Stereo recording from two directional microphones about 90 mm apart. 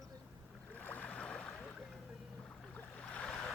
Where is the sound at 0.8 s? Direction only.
20° left (ahead or behind).